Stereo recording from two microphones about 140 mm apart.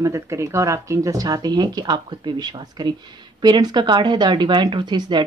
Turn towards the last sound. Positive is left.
turn(degrees=-35)  # may be behind; listen again after turning